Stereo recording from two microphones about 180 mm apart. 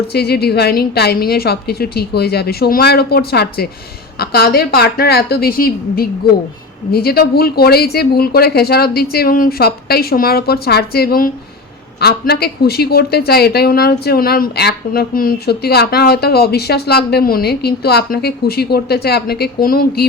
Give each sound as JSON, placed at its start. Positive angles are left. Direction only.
{"t": 0.1, "sound": "speech", "side_deg": 60}